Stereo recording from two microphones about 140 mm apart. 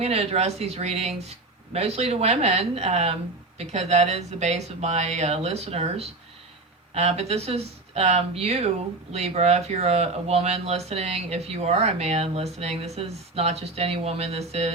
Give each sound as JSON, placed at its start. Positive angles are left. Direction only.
{"t": 0.0, "sound": "speech", "side_deg": -45}